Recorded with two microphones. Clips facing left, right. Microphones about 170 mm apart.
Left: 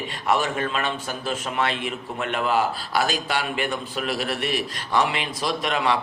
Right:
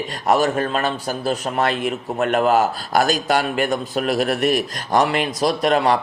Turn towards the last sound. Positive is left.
turn(degrees=-40)  # may be behind; listen again after turning